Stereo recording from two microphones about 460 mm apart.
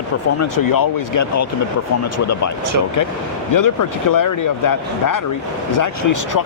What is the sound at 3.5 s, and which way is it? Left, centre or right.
Speech, left.